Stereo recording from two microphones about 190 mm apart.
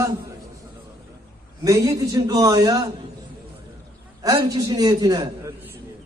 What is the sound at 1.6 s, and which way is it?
A man's voice, 15° right (ahead or behind).